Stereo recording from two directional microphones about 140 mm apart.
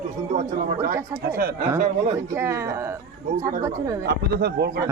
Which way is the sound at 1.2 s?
90° right.